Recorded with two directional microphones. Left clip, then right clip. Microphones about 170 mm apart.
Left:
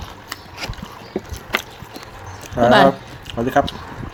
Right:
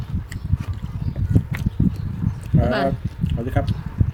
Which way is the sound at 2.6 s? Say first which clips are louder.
Left 11 dB; 15° right (ahead or behind).